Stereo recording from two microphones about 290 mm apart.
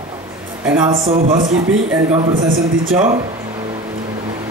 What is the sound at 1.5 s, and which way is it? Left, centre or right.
A man's voice, centre.